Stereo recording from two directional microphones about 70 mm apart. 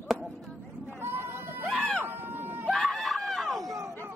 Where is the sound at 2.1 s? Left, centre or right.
Right.